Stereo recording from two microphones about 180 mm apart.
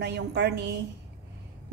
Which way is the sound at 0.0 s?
70° right (ahead or behind).